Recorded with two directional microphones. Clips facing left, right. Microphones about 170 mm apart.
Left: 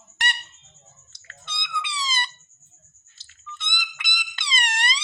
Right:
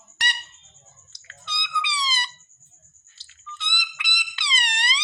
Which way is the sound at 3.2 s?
45° left (ahead or behind).